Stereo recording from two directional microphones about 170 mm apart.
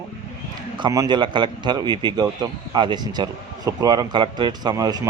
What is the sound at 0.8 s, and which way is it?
A man's voice, 25° right (ahead or behind).